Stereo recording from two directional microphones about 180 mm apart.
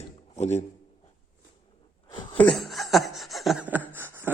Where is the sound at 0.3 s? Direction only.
40° left (ahead or behind).